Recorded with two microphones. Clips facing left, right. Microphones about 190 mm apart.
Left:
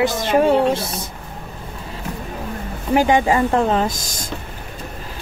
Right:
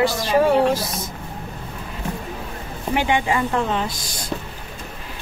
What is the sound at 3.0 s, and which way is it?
Speech, 40° left (ahead or behind).